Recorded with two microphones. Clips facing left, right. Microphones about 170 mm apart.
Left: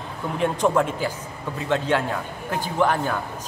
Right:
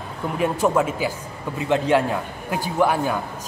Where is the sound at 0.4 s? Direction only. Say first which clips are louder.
Right 1 dB; 5° right (ahead or behind).